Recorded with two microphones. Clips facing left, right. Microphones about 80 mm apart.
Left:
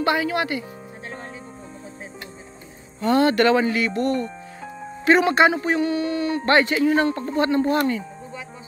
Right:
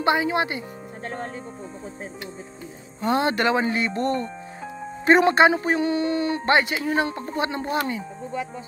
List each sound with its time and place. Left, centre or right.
0.0 s speech: right
3.0 s speech: right